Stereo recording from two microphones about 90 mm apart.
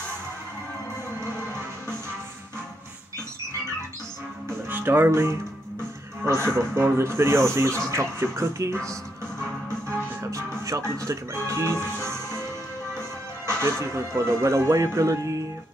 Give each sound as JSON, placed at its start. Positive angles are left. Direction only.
{"t": 4.5, "sound": "music", "side_deg": -20}
{"t": 6.2, "sound": "speech", "side_deg": -30}
{"t": 9.4, "sound": "music", "side_deg": -30}
{"t": 13.6, "sound": "speech", "side_deg": -30}